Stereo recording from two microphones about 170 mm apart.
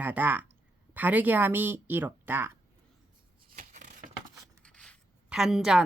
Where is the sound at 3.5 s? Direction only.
50° right (ahead or behind).